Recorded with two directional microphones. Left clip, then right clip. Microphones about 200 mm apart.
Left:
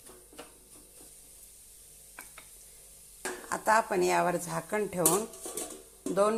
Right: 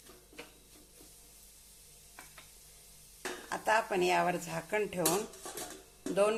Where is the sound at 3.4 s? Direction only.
20° left (ahead or behind).